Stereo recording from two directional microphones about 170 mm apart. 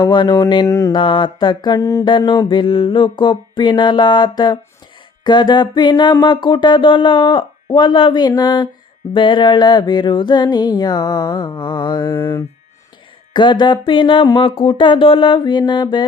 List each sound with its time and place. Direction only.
0.0 s music: 25° left (ahead or behind)
13.3 s music: 25° left (ahead or behind)